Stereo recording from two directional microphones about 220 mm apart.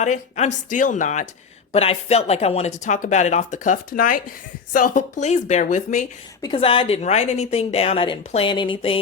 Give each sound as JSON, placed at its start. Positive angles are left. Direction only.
{"t": 0.0, "sound": "speech", "side_deg": 30}
{"t": 6.4, "sound": "a woman's voice", "side_deg": 25}